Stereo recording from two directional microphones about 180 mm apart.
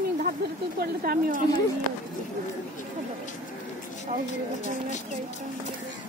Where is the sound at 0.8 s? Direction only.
55° right (ahead or behind).